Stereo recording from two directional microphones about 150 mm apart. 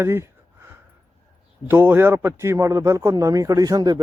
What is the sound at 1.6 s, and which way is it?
A man's voice, 15° right (ahead or behind).